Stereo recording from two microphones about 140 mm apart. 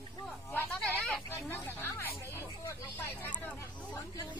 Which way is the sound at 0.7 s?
5° left (ahead or behind).